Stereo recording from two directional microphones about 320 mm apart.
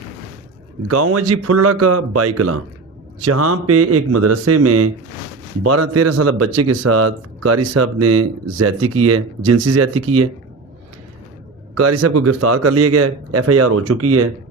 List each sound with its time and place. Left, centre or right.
0.9 s speech: right
11.7 s speech: right